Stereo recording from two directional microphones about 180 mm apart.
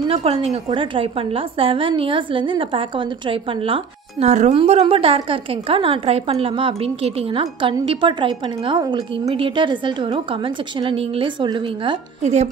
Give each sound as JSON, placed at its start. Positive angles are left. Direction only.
{"t": 0.1, "sound": "a woman's voice", "side_deg": -30}
{"t": 12.2, "sound": "a woman's voice", "side_deg": -40}